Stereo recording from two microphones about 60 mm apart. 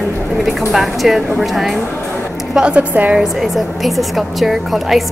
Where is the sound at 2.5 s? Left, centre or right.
Centre.